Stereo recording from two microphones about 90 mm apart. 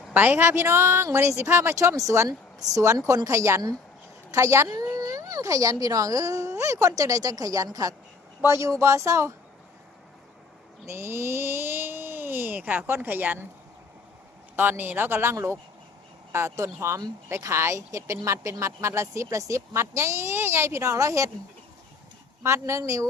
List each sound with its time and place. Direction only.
0.1 s a woman's voice: 20° right (ahead or behind)
10.8 s speech: 30° right (ahead or behind)
14.5 s a woman's voice: 20° right (ahead or behind)
22.4 s speech: 30° right (ahead or behind)